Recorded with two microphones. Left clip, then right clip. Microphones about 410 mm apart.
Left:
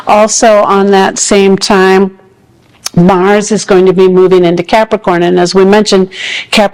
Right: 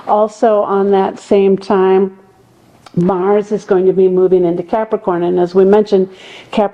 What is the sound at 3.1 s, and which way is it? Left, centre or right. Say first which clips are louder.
Speech: left 6 dB; left.